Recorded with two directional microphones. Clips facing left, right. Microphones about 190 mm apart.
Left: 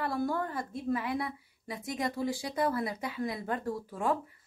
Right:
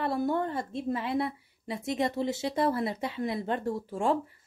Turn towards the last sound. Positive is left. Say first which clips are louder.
# right 3 dB
turn(degrees=-25)  # may be behind; listen again after turning